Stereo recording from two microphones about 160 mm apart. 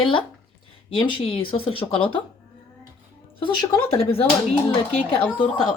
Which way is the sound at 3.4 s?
35° left (ahead or behind).